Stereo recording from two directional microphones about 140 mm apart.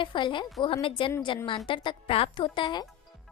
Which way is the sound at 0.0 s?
35° left (ahead or behind).